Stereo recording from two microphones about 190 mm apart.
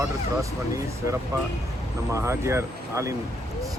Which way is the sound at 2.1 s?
15° right (ahead or behind).